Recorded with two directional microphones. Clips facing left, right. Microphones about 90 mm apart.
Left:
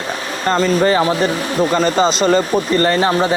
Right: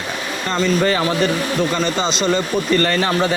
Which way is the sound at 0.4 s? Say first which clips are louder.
Left 4 dB; 40° left (ahead or behind).